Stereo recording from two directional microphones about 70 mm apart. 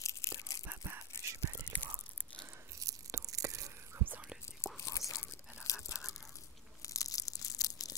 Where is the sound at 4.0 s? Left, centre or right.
Right.